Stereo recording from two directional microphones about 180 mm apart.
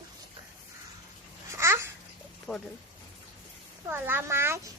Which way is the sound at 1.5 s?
15° right (ahead or behind).